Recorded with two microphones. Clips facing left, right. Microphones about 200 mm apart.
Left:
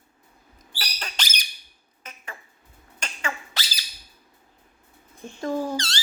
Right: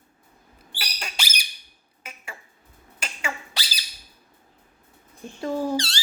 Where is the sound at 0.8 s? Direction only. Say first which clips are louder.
Even; 10° right (ahead or behind).